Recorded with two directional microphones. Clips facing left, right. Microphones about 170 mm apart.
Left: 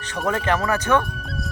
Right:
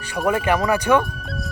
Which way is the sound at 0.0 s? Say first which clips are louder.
Right 3 dB; 10° right (ahead or behind).